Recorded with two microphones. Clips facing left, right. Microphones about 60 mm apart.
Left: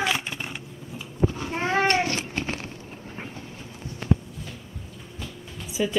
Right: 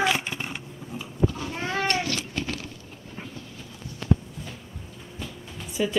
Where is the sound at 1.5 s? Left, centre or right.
Left.